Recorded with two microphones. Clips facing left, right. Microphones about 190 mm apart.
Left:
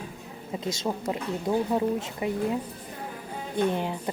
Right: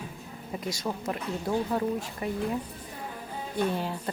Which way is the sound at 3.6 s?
20° left (ahead or behind).